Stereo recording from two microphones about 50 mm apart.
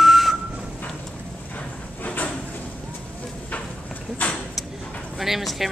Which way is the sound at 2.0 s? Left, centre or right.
Left.